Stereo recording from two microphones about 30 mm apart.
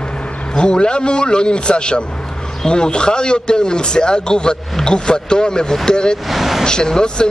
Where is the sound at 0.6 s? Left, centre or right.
Left.